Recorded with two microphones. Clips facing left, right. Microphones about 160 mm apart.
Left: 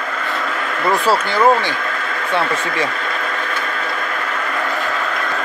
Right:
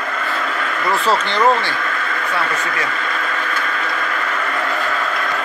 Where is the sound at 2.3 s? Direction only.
30° left (ahead or behind).